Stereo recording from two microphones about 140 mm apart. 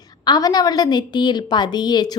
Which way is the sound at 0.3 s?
25° left (ahead or behind).